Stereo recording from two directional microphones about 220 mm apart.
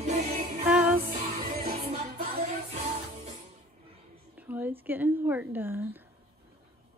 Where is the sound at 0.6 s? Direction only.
5° right (ahead or behind).